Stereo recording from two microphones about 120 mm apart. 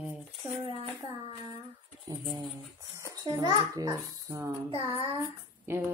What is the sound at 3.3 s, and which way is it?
Speech, 35° right (ahead or behind).